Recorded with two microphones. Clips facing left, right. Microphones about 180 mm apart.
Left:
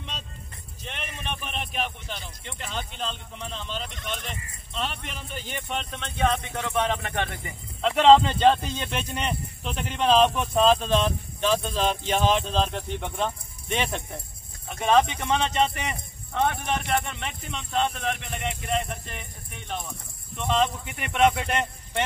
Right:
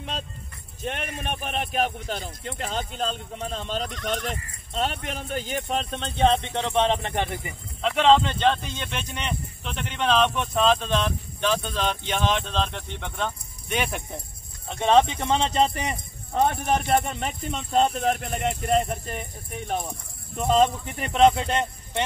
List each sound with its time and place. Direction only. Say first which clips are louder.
0.8 s speech: right 5 dB; 50° right (ahead or behind); by 7.3 s 20° right (ahead or behind)
7.3 s speech: right 3 dB; centre (ahead or behind)
14.7 s speech: right 2 dB; 30° right (ahead or behind)